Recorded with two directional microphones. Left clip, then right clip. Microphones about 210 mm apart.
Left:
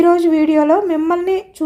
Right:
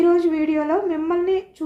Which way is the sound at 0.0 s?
55° left (ahead or behind).